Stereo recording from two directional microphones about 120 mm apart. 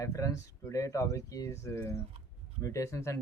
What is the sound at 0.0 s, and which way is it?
Speech, 25° left (ahead or behind).